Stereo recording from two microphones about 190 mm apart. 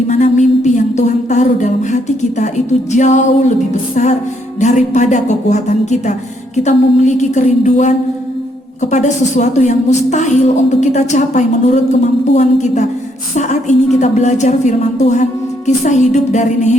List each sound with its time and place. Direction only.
0.1 s a sound: 40° left (ahead or behind)
2.9 s a woman's voice: 40° left (ahead or behind)
4.6 s a woman's voice: 40° left (ahead or behind)